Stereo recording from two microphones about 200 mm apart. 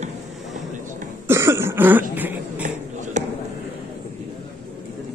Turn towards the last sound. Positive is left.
turn(degrees=-35)  # may be behind; listen again after turning